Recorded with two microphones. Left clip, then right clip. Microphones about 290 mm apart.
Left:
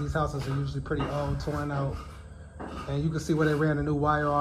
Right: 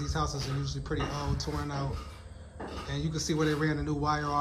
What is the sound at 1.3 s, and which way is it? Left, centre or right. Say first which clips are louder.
Speech: left 3 dB; centre.